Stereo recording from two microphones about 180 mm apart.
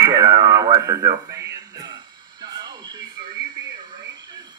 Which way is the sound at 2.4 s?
25° right (ahead or behind).